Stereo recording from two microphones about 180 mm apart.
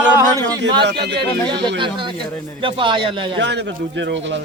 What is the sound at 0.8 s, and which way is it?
Speech, 70° right (ahead or behind).